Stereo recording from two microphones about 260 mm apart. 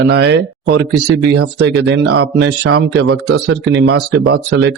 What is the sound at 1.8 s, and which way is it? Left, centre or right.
Speech, right.